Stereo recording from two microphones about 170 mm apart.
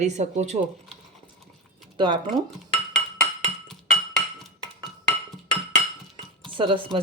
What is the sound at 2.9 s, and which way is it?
Music, 40° right (ahead or behind).